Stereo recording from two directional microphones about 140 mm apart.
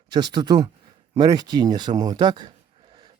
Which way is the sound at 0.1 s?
30° right (ahead or behind).